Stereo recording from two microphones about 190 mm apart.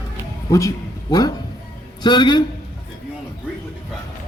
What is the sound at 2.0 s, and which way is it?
Speech, 25° left (ahead or behind).